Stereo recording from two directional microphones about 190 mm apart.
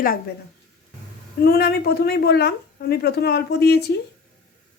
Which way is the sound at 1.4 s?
55° left (ahead or behind).